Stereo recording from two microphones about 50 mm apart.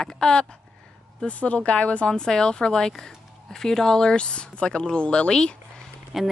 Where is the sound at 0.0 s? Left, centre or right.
Centre.